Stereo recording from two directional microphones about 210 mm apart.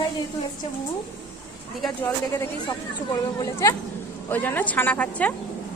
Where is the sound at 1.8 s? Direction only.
10° left (ahead or behind).